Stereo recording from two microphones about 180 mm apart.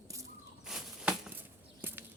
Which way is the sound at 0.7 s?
5° right (ahead or behind).